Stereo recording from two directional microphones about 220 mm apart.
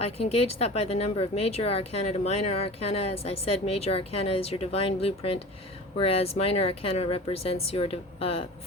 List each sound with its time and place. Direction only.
0.0 s speech: 25° left (ahead or behind)